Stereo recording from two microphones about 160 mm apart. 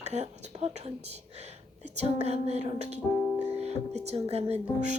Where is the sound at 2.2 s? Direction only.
40° right (ahead or behind).